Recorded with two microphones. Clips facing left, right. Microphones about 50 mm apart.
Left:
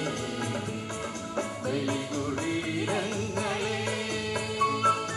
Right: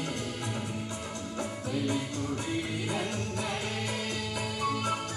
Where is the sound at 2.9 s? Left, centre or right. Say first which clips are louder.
Left 3 dB; left.